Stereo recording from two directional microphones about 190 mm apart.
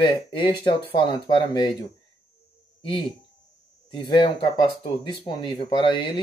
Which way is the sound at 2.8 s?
30° left (ahead or behind).